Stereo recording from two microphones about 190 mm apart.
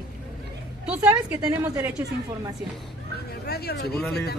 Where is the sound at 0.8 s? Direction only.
5° right (ahead or behind).